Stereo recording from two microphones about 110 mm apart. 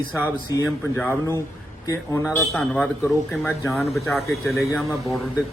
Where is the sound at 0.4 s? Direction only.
30° left (ahead or behind).